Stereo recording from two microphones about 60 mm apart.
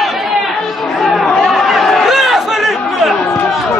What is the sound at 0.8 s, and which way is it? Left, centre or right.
Chatter, centre.